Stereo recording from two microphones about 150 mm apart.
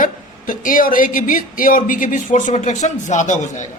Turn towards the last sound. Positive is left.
turn(degrees=55)  # may be behind; listen again after turning